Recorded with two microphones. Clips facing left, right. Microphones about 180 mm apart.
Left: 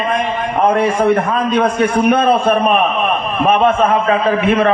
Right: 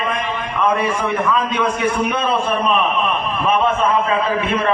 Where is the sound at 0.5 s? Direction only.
55° left (ahead or behind).